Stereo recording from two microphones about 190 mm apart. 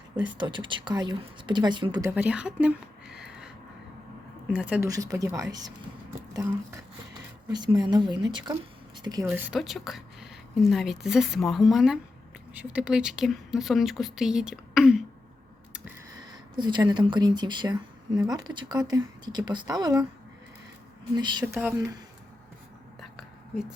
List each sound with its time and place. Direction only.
0.3 s a woman's voice: 25° right (ahead or behind)
2.0 s a sound: 5° right (ahead or behind)
4.4 s speech: 5° right (ahead or behind)
7.4 s a woman's voice: 20° right (ahead or behind)
9.0 s a sound: 20° right (ahead or behind)
9.3 s speech: 5° right (ahead or behind)
16.6 s a woman's voice: 25° right (ahead or behind)
21.2 s speech: 20° right (ahead or behind)
23.0 s whispering: centre (ahead or behind)